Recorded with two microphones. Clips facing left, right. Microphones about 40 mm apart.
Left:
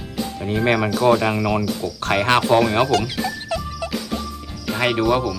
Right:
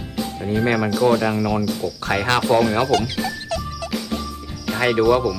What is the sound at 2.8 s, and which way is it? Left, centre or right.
Speech, centre.